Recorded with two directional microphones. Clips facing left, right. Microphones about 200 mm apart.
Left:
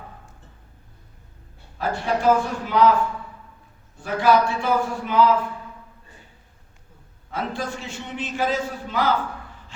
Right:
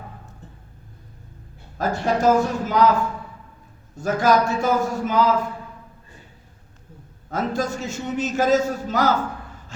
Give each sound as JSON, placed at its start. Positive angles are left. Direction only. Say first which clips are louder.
{"t": 1.8, "sound": "a man's voice", "louder": "right 2 dB", "side_deg": -40}
{"t": 3.9, "sound": "a man's voice", "louder": "even", "side_deg": -45}
{"t": 7.3, "sound": "a man's voice", "louder": "right 4 dB", "side_deg": -45}